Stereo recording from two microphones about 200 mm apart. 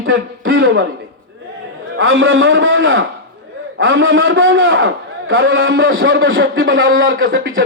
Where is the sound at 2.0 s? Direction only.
75° right (ahead or behind).